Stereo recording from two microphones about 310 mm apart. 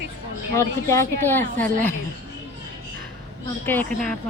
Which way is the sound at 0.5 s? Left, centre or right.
Centre.